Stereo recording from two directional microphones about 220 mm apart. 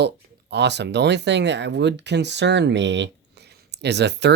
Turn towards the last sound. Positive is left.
turn(degrees=-50)  # may be behind; listen again after turning